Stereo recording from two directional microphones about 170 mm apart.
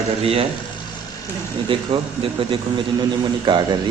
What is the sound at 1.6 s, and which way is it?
A man's voice, 30° right (ahead or behind).